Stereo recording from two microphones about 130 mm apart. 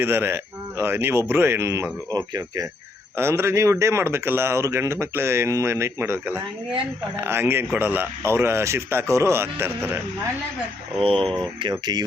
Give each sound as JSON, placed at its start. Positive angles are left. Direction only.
{"t": 0.0, "sound": "speech", "side_deg": -20}
{"t": 3.2, "sound": "speech", "side_deg": -20}
{"t": 11.0, "sound": "speech", "side_deg": -45}